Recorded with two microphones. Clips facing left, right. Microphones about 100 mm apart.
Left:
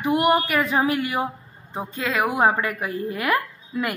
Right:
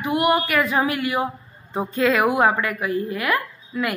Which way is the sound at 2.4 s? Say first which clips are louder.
Right 1 dB; 30° left (ahead or behind).